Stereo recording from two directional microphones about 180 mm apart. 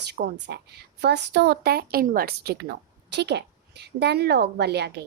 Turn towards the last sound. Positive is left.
turn(degrees=-65)  # may be behind; listen again after turning